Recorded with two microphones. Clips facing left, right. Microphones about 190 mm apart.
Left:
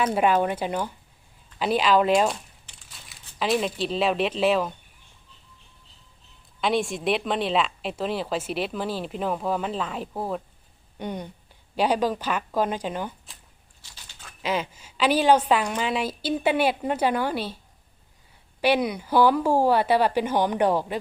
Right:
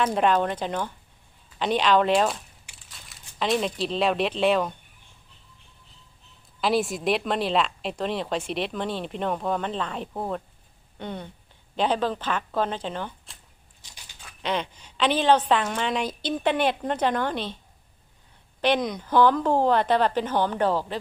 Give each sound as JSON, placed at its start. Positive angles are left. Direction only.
{"t": 0.0, "sound": "a woman's voice", "side_deg": 10}
{"t": 2.7, "sound": "crumpling", "side_deg": -10}
{"t": 3.1, "sound": "speech", "side_deg": 0}
{"t": 6.6, "sound": "a woman's voice", "side_deg": 0}
{"t": 13.8, "sound": "a sound", "side_deg": -15}
{"t": 14.4, "sound": "a woman's voice", "side_deg": 5}
{"t": 18.6, "sound": "a woman's voice", "side_deg": 10}